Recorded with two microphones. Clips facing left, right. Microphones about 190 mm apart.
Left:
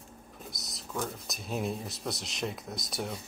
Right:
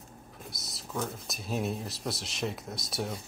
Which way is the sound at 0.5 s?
Centre (ahead or behind).